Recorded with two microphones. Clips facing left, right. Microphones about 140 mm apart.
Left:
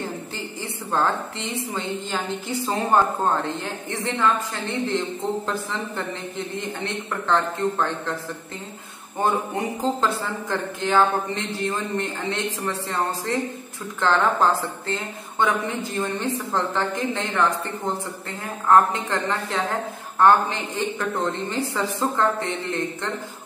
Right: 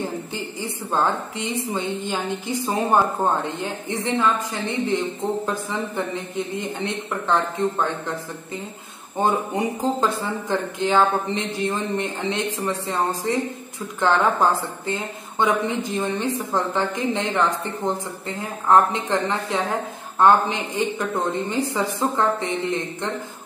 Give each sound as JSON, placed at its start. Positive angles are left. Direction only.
{"t": 0.9, "sound": "a woman's voice", "side_deg": -15}
{"t": 5.5, "sound": "a woman's voice", "side_deg": -15}
{"t": 9.2, "sound": "a woman's voice", "side_deg": -15}
{"t": 18.7, "sound": "a woman's voice", "side_deg": -15}